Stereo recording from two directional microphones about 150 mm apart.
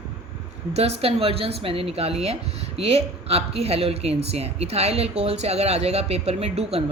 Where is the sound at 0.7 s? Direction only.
45° right (ahead or behind).